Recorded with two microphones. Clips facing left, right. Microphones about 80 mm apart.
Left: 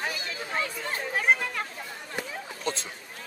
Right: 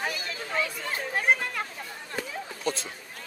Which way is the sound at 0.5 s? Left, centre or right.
Left.